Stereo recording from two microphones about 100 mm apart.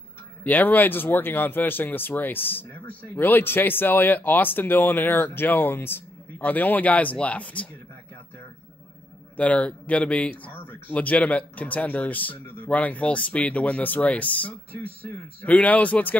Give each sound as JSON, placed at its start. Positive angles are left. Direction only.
{"t": 0.4, "sound": "speech", "side_deg": 15}
{"t": 9.4, "sound": "speech", "side_deg": 15}